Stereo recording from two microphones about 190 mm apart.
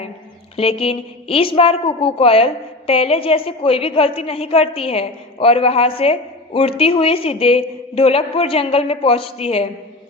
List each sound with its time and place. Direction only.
0.5 s a woman's voice: 30° left (ahead or behind)